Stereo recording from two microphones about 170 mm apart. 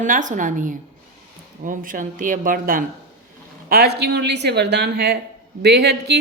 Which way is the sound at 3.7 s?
70° right (ahead or behind).